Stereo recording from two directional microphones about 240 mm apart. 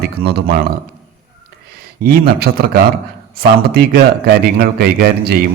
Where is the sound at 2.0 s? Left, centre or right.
Right.